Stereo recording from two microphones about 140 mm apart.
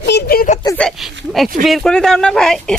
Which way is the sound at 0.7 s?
Centre (ahead or behind).